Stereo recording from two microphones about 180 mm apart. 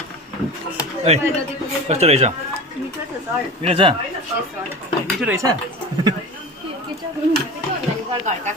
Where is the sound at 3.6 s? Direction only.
30° right (ahead or behind).